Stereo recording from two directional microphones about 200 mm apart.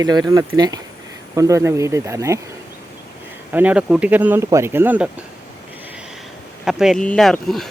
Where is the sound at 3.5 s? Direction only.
5° right (ahead or behind).